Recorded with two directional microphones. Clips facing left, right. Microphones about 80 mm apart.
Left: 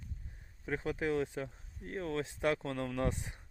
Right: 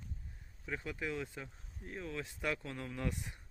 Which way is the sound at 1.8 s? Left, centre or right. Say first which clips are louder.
Left 5 dB; left.